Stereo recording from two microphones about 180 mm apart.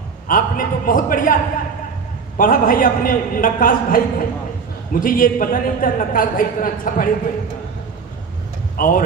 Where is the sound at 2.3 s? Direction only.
50° left (ahead or behind).